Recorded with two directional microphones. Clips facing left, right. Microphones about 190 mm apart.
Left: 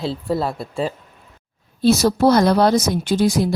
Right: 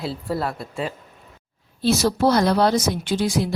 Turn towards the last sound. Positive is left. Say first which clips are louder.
# left 4 dB
turn(degrees=40)  # may be behind; listen again after turning